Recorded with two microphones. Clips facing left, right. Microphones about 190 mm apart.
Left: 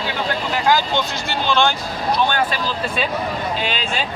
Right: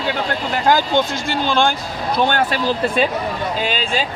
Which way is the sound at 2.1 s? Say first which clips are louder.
Right 3 dB; 55° right (ahead or behind).